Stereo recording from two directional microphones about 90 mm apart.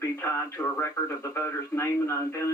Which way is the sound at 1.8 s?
30° left (ahead or behind).